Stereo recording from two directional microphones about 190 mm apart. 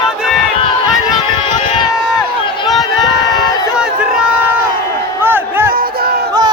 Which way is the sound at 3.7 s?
5° right (ahead or behind).